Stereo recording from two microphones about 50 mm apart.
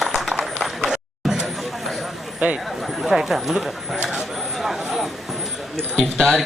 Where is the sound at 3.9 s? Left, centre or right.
Centre.